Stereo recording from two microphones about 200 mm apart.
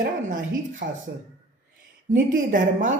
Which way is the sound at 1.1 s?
50° right (ahead or behind).